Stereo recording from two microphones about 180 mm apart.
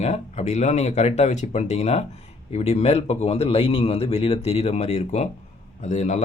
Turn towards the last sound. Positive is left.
turn(degrees=40)  # may be behind; listen again after turning